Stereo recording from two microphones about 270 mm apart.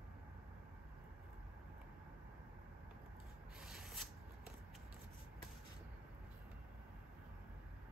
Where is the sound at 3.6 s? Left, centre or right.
Centre.